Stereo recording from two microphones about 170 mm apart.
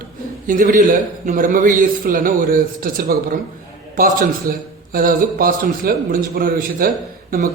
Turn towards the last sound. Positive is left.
turn(degrees=-60)  # may be behind; listen again after turning